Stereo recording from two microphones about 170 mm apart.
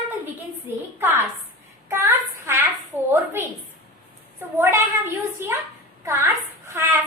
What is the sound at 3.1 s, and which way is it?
Speech, 15° right (ahead or behind).